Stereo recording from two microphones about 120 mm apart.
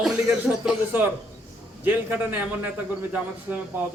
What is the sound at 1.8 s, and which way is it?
A man's voice, 15° right (ahead or behind).